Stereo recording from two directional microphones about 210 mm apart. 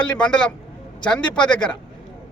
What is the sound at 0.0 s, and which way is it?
A man's voice, 5° left (ahead or behind).